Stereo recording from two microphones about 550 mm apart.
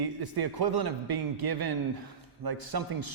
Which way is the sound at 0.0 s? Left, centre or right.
Right.